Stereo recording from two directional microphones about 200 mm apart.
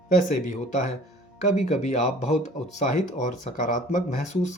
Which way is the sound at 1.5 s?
35° left (ahead or behind).